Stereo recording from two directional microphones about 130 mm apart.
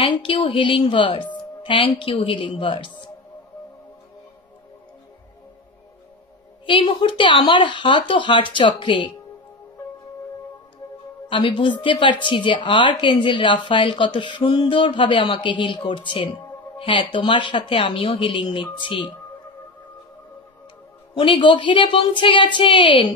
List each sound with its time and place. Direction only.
0.0 s a woman's voice: 40° left (ahead or behind)
6.6 s a woman's voice: 40° left (ahead or behind)
11.2 s a woman's voice: 40° left (ahead or behind)
21.1 s a woman's voice: 40° left (ahead or behind)